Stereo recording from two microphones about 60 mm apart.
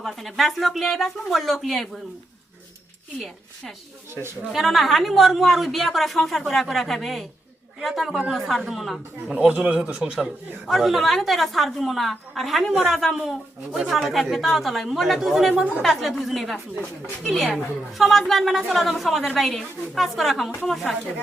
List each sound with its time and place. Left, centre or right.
0.0 s a woman's voice: centre
4.1 s speech: right
4.5 s a woman's voice: centre
9.3 s speech: centre
10.7 s a woman's voice: centre